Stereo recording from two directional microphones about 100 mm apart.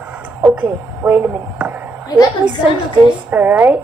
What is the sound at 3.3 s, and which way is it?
Speech, 20° right (ahead or behind).